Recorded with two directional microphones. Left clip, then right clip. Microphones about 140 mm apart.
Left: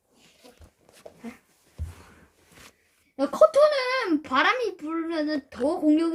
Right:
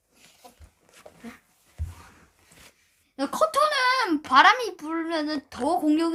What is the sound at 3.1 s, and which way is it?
A child's voice, 30° right (ahead or behind).